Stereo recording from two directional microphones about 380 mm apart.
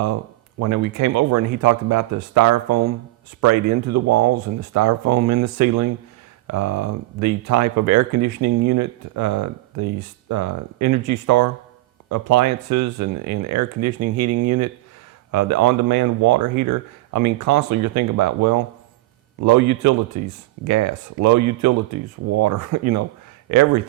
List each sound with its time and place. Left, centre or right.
0.6 s speech: right